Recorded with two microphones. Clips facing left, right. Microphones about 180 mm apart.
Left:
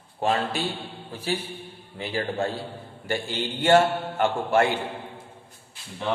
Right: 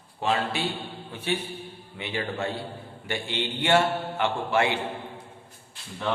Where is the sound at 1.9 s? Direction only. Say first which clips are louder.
Left 3 dB; 40° left (ahead or behind).